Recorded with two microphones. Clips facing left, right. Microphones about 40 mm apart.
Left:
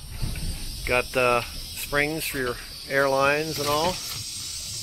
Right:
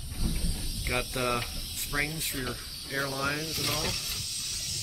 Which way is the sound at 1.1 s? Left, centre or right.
Left.